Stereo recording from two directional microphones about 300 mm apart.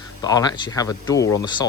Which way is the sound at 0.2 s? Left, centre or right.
Centre.